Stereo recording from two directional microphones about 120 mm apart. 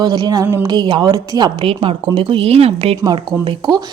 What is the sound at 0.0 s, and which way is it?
Speech, 35° right (ahead or behind).